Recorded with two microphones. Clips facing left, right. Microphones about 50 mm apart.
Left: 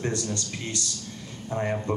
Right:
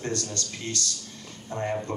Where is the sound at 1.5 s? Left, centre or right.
Centre.